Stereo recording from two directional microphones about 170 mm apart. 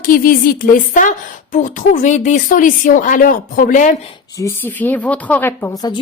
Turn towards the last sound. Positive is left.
turn(degrees=25)  # may be behind; listen again after turning